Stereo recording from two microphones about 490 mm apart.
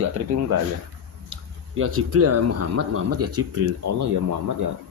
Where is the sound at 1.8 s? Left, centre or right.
Right.